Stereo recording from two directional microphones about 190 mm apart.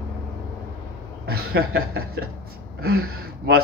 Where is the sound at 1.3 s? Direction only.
55° right (ahead or behind).